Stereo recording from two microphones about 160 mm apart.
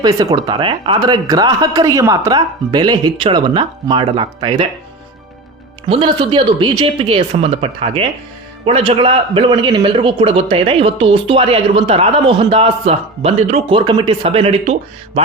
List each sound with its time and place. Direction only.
0.0 s speech: 25° right (ahead or behind)
5.9 s a man's voice: 30° right (ahead or behind)